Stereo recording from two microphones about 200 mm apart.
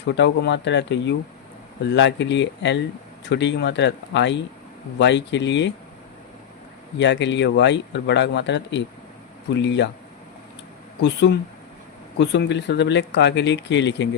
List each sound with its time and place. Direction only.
0.0 s speech: 60° left (ahead or behind)
7.0 s speech: 60° left (ahead or behind)
11.0 s speech: 60° left (ahead or behind)